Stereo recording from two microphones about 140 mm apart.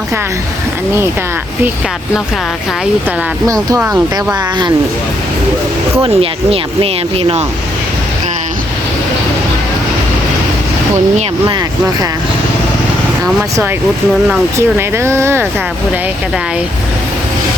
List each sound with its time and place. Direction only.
3.4 s speech: 25° right (ahead or behind)
3.8 s speech: 10° right (ahead or behind)
6.0 s speech: 45° right (ahead or behind)
14.8 s speech: 20° right (ahead or behind)